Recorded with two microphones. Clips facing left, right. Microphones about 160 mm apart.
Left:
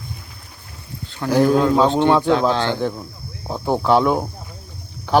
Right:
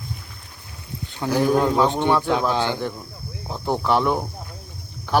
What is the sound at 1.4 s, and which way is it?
Speech, 15° right (ahead or behind).